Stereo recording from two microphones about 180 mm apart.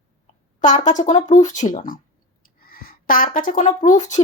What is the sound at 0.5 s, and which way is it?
Speech, 45° left (ahead or behind).